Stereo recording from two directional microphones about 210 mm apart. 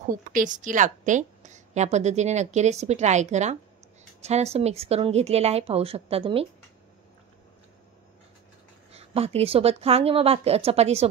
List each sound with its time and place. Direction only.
0.3 s a woman's voice: 40° right (ahead or behind)
8.9 s speech: 30° right (ahead or behind)